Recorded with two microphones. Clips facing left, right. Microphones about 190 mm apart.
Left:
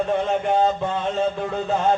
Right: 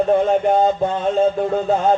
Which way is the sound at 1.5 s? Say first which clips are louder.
Right 4 dB; 40° right (ahead or behind).